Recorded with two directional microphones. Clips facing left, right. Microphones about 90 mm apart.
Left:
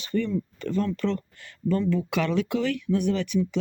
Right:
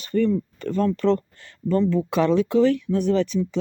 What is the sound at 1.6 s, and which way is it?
Speech, 30° right (ahead or behind).